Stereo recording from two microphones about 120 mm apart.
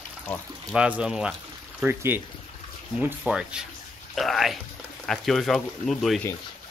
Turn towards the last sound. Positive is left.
turn(degrees=0)  # may be behind; listen again after turning